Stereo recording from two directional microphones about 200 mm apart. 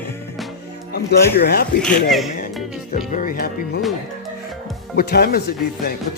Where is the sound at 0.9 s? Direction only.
50° left (ahead or behind).